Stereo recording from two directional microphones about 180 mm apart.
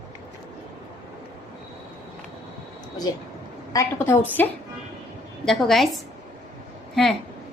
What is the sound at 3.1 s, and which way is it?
A woman's voice, 20° left (ahead or behind).